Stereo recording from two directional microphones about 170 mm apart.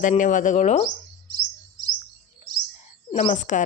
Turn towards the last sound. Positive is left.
turn(degrees=45)  # may be behind; listen again after turning